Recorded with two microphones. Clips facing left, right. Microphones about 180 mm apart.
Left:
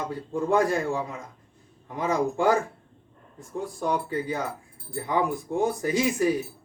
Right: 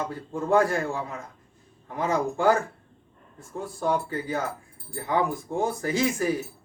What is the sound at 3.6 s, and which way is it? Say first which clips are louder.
Speech: right 1 dB; 15° left (ahead or behind).